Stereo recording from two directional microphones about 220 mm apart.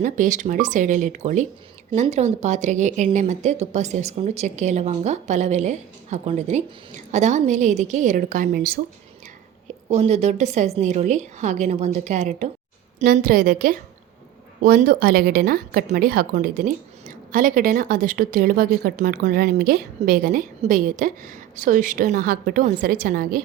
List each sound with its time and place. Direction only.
0.0 s a woman's voice: 35° right (ahead or behind)
9.9 s a woman's voice: 30° right (ahead or behind)